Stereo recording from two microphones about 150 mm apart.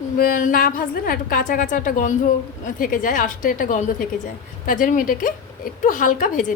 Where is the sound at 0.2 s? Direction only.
65° left (ahead or behind).